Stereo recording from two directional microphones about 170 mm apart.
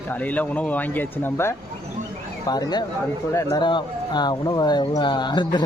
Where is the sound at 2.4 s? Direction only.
25° left (ahead or behind).